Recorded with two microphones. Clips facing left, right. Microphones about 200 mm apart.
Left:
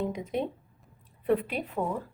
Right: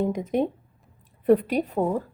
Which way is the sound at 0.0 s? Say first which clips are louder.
Right 7 dB; 45° right (ahead or behind).